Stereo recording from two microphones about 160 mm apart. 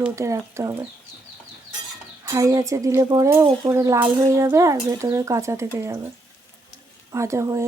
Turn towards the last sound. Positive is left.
turn(degrees=-20)  # may be behind; listen again after turning